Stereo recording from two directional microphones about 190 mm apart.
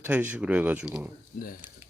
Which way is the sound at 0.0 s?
10° right (ahead or behind).